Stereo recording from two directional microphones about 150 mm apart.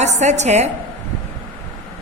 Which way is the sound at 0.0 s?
50° right (ahead or behind).